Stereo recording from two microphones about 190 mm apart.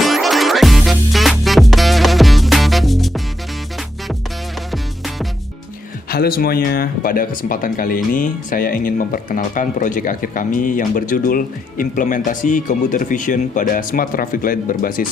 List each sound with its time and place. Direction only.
0.0 s music: centre (ahead or behind)
6.1 s speech: 55° left (ahead or behind)